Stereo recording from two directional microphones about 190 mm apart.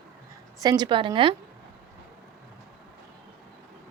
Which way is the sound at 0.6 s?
20° right (ahead or behind).